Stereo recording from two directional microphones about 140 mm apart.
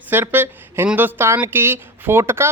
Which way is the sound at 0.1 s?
15° right (ahead or behind).